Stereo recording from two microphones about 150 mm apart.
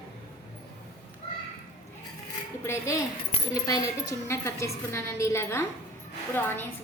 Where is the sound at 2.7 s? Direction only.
20° left (ahead or behind).